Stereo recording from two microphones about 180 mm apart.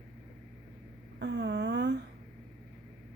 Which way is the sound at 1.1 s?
70° right (ahead or behind).